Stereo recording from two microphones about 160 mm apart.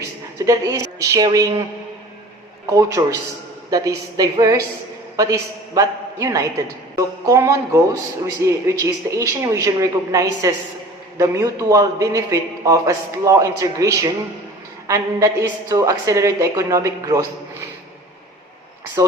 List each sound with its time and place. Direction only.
0.3 s a man's voice: 20° right (ahead or behind)
2.6 s a man's voice: 20° right (ahead or behind)
19.0 s a man's voice: 20° right (ahead or behind)